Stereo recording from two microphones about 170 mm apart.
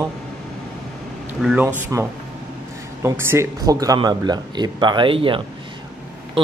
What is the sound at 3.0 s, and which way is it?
Speech, 15° right (ahead or behind).